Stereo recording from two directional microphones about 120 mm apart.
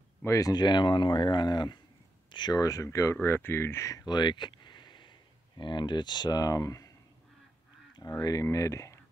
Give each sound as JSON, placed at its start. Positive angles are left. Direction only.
{"t": 0.2, "sound": "speech", "side_deg": 25}
{"t": 4.0, "sound": "a sound", "side_deg": 35}
{"t": 5.6, "sound": "speech", "side_deg": 40}
{"t": 8.0, "sound": "speech", "side_deg": 30}